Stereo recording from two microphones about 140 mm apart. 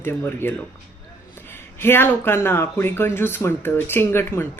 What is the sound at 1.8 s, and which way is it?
Speech, 15° left (ahead or behind).